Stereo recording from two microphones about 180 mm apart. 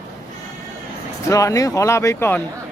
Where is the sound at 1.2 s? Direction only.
20° left (ahead or behind).